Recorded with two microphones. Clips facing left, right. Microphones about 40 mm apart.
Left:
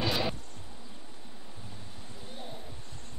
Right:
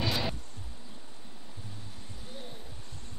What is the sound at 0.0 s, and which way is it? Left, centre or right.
Music, centre.